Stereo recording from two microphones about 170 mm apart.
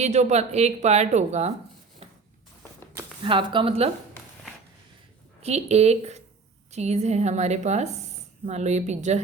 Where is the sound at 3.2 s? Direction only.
30° right (ahead or behind).